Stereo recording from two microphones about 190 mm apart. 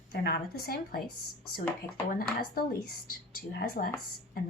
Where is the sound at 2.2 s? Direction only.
50° left (ahead or behind).